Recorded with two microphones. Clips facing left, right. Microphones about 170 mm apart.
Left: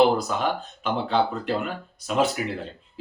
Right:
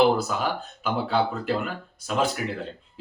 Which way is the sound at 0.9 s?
5° right (ahead or behind).